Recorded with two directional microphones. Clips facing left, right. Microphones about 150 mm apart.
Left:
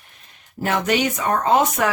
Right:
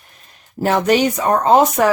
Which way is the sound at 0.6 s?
35° right (ahead or behind).